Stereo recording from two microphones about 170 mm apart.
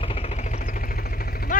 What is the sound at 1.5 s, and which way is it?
Vehicle, 50° left (ahead or behind).